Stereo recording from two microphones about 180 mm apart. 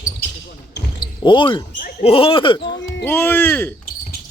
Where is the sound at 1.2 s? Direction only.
25° left (ahead or behind).